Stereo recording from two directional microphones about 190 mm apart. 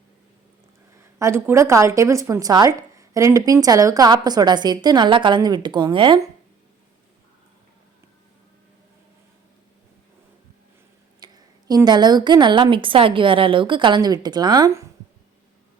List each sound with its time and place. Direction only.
1.2 s speech: 15° right (ahead or behind)
11.2 s speech: 20° right (ahead or behind)